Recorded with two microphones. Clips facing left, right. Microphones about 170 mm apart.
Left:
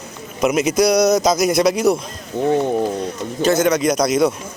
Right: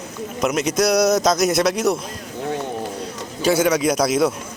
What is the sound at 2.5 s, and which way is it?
Speech, 20° left (ahead or behind).